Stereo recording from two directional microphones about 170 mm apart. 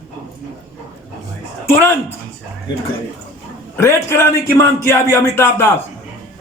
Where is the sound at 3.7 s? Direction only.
15° left (ahead or behind).